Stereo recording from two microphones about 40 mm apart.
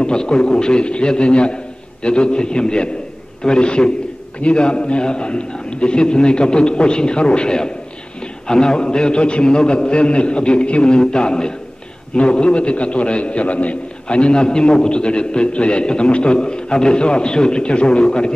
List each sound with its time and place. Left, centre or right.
0.0 s a man's voice: centre